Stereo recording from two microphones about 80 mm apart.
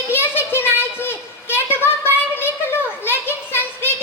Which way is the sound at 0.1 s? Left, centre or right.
Left.